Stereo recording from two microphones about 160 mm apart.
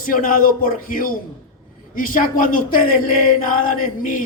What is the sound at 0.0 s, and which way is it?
Speech, 60° left (ahead or behind).